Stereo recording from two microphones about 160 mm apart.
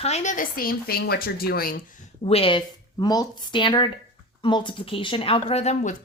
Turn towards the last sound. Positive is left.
turn(degrees=45)  # may be behind; listen again after turning